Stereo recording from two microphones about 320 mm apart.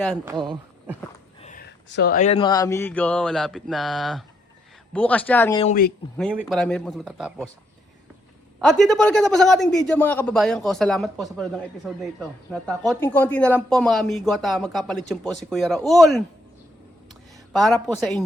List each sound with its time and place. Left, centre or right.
0.0 s a man's voice: centre
1.4 s a man's voice: left; by 5.6 s centre
5.6 s speech: left
6.1 s a man's voice: centre
8.5 s a man's voice: centre
17.5 s a man's voice: centre